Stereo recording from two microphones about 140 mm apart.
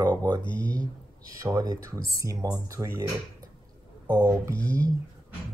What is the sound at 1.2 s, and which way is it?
Speech, 25° right (ahead or behind).